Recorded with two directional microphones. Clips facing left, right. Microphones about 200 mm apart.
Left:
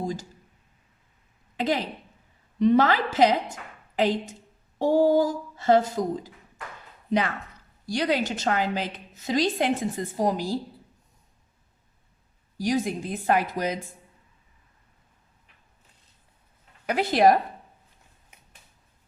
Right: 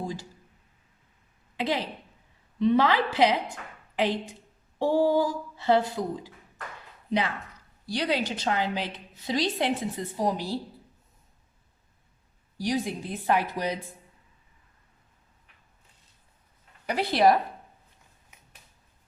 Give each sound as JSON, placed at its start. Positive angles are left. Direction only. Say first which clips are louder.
{"t": 0.0, "sound": "speech", "louder": "left 4 dB", "side_deg": 45}
{"t": 1.5, "sound": "a woman's voice", "louder": "left 3 dB", "side_deg": 45}
{"t": 7.9, "sound": "a woman's voice", "louder": "left 3 dB", "side_deg": 45}
{"t": 12.5, "sound": "a woman's voice", "louder": "left 3 dB", "side_deg": 45}
{"t": 16.9, "sound": "a woman's voice", "louder": "left 2 dB", "side_deg": 45}